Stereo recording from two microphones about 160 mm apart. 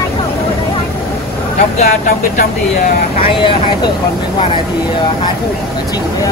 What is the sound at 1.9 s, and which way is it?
Speech, 60° left (ahead or behind).